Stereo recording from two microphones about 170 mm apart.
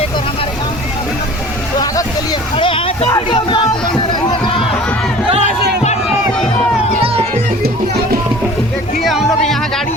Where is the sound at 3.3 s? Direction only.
30° left (ahead or behind).